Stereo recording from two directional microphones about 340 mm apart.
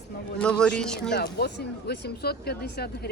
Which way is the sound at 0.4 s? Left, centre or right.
Centre.